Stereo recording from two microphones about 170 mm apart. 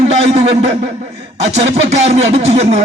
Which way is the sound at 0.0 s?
40° right (ahead or behind).